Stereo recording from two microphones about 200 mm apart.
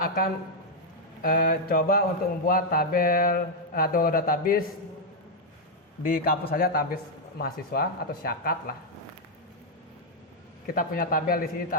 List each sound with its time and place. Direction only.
0.0 s a sound: 45° left (ahead or behind)
1.2 s speech: 45° left (ahead or behind)
6.0 s speech: 45° left (ahead or behind)
10.7 s speech: 45° left (ahead or behind)